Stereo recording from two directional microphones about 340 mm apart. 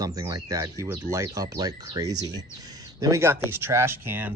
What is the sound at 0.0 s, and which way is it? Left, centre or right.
Speech, centre.